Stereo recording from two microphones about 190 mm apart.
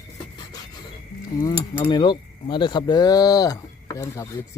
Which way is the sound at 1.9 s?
25° left (ahead or behind).